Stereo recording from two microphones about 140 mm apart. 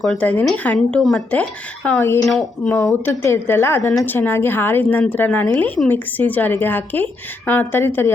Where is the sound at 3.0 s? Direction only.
20° left (ahead or behind).